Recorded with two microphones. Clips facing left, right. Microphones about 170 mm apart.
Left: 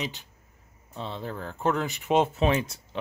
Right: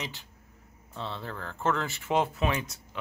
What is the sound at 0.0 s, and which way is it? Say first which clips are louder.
Speech: left 5 dB; 20° left (ahead or behind).